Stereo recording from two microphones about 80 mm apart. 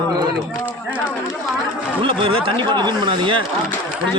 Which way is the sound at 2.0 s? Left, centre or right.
Right.